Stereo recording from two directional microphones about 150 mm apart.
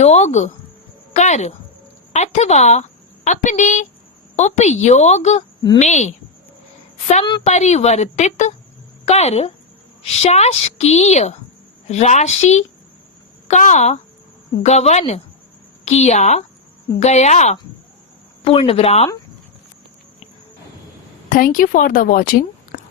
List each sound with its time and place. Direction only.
0.0 s a woman's voice: 50° left (ahead or behind)
7.4 s speech: 50° left (ahead or behind)
21.2 s speech: 65° left (ahead or behind)